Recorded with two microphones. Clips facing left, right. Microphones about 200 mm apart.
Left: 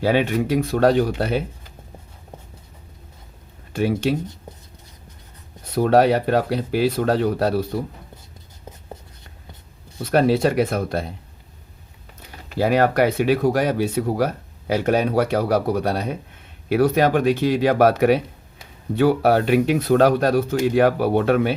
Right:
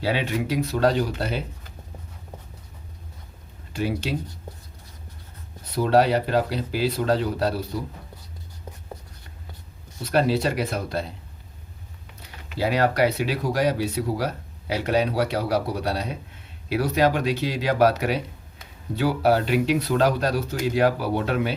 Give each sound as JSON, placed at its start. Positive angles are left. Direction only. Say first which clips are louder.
{"t": 0.0, "sound": "speech", "louder": "left 6 dB", "side_deg": 50}
{"t": 3.7, "sound": "speech", "louder": "left 6 dB", "side_deg": 55}
{"t": 5.7, "sound": "speech", "louder": "left 3 dB", "side_deg": 50}
{"t": 10.1, "sound": "speech", "louder": "left 4 dB", "side_deg": 50}
{"t": 12.4, "sound": "speech", "louder": "left 4 dB", "side_deg": 45}